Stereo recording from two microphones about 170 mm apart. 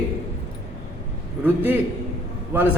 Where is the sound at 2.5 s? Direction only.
15° right (ahead or behind).